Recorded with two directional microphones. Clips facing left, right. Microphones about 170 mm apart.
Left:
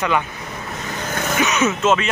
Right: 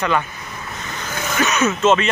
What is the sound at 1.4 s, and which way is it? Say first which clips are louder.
Speech: right 1 dB; 15° left (ahead or behind).